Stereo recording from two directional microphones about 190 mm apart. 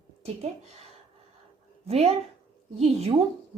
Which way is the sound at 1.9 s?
35° right (ahead or behind).